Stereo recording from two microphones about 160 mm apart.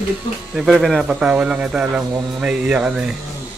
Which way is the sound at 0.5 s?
Centre (ahead or behind).